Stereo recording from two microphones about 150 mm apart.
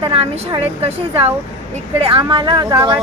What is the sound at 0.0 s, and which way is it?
Speech, 40° right (ahead or behind).